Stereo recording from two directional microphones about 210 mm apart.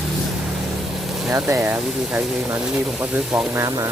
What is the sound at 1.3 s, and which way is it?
Speech, 15° right (ahead or behind).